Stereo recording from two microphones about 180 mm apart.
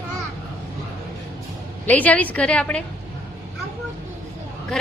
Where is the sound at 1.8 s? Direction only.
10° left (ahead or behind).